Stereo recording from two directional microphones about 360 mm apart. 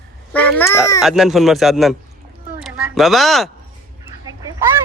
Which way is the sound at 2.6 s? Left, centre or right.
Centre.